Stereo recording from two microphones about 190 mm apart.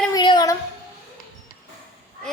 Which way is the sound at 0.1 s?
20° left (ahead or behind).